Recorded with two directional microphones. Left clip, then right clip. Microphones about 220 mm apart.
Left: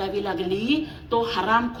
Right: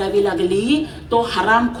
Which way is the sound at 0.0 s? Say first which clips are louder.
Right 9 dB; 25° left (ahead or behind).